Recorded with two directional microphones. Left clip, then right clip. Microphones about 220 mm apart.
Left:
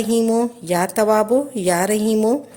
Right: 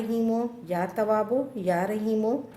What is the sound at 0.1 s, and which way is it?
A woman's voice, 40° left (ahead or behind).